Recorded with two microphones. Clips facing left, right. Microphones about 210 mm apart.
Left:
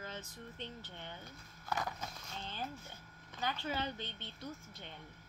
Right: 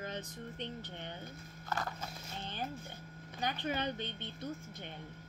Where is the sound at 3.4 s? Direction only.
20° right (ahead or behind).